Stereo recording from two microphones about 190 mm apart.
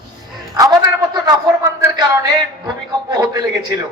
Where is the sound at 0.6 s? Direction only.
20° right (ahead or behind).